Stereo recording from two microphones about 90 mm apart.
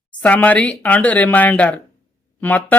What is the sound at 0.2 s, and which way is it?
Speech, 15° left (ahead or behind).